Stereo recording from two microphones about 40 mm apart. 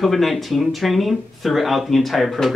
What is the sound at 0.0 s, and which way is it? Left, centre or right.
Speech, centre.